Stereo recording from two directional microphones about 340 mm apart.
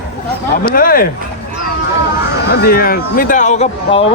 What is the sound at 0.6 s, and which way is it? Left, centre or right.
Speech, left.